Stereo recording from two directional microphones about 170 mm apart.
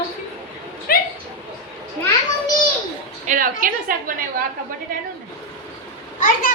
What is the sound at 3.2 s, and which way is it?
Speech, 50° right (ahead or behind).